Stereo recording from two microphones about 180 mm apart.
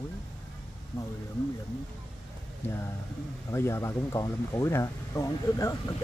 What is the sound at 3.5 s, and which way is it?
Speech, 15° left (ahead or behind).